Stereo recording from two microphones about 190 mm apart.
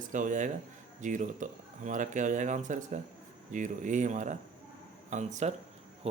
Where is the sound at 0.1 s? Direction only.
40° right (ahead or behind).